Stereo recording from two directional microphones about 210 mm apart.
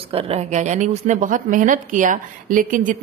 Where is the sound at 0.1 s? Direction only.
30° right (ahead or behind).